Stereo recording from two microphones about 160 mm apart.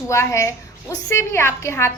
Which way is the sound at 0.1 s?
15° left (ahead or behind).